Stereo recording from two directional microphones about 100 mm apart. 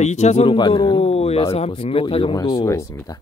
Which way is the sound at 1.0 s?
90° left.